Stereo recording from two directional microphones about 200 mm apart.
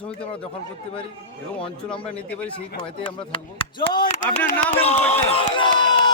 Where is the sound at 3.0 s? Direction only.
25° left (ahead or behind).